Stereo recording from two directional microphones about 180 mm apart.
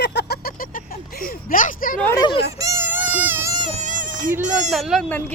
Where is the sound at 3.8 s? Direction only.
45° right (ahead or behind).